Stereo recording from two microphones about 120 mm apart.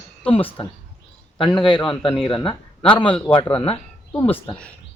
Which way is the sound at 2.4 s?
45° left (ahead or behind).